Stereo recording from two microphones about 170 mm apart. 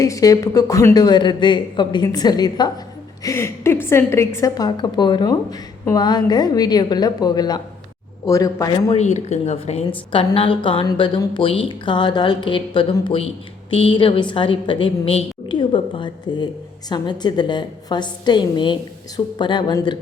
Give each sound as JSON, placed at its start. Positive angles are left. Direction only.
{"t": 0.0, "sound": "a woman's voice", "side_deg": 20}
{"t": 9.0, "sound": "a woman's voice", "side_deg": 40}